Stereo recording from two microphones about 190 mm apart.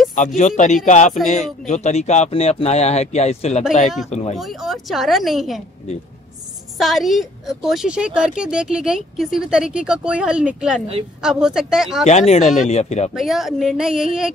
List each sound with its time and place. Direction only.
0.4 s speech: 40° left (ahead or behind)
1.1 s a woman's voice: centre (ahead or behind)
1.7 s speech: 35° left (ahead or behind)
4.4 s a woman's voice: centre (ahead or behind)
6.8 s a woman's voice: centre (ahead or behind)
12.1 s speech: 35° left (ahead or behind)
13.1 s a woman's voice: centre (ahead or behind)